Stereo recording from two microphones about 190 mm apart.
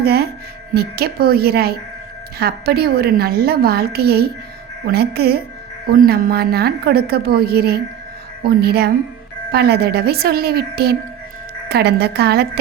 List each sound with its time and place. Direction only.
0.0 s a woman's voice: 55° right (ahead or behind)